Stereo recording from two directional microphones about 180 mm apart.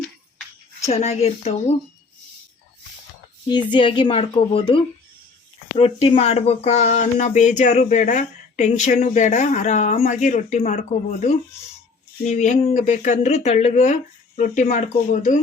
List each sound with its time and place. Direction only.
0.9 s speech: 35° left (ahead or behind)
3.4 s speech: 25° left (ahead or behind); by 10.8 s 40° left (ahead or behind)
12.2 s speech: 40° left (ahead or behind)